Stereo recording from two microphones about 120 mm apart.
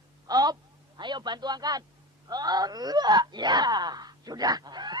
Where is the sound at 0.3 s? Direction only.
30° right (ahead or behind).